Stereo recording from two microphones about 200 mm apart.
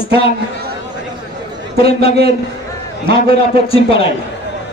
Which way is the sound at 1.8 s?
30° left (ahead or behind).